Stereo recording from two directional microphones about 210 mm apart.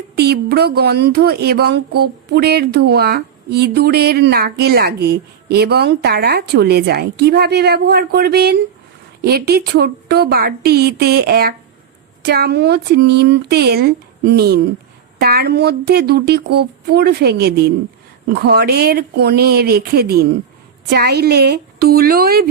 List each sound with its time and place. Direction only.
0.2 s speech: 50° right (ahead or behind)